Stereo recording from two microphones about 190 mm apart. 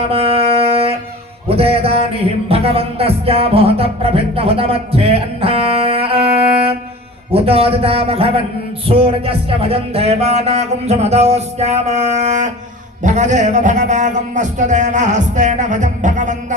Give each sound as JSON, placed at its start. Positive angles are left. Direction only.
{"t": 0.1, "sound": "music", "side_deg": -30}
{"t": 7.3, "sound": "speech", "side_deg": -30}